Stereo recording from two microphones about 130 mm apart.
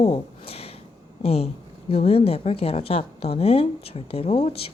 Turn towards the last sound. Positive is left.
turn(degrees=45)  # may be behind; listen again after turning